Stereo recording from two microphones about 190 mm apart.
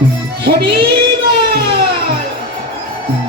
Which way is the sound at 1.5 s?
55° right (ahead or behind).